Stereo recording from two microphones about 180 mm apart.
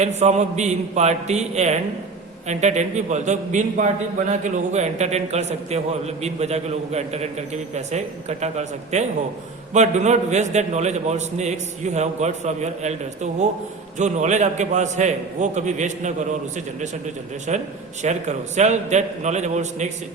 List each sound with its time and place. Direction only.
0.0 s a man's voice: 40° right (ahead or behind)
14.0 s a man's voice: 40° right (ahead or behind)